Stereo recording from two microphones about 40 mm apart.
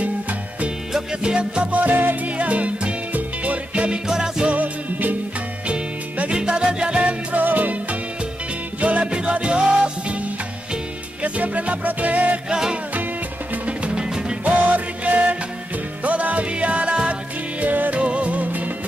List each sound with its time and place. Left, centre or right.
0.0 s music: right
1.2 s music: right
1.7 s music: right
4.1 s music: right
4.5 s music: right
6.3 s music: centre
7.4 s music: right
9.0 s music: right
11.2 s music: right
12.4 s music: centre
14.4 s music: right
17.6 s music: right
17.9 s music: right